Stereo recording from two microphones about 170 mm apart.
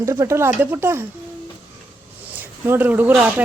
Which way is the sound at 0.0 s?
15° right (ahead or behind).